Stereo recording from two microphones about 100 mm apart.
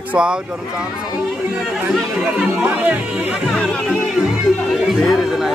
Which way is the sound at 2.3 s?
15° right (ahead or behind).